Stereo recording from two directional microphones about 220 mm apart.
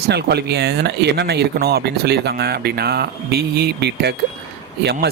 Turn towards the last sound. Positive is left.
turn(degrees=-50)  # may be behind; listen again after turning